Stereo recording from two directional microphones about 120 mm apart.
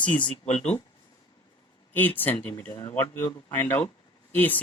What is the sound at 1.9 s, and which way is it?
Speech, 15° left (ahead or behind).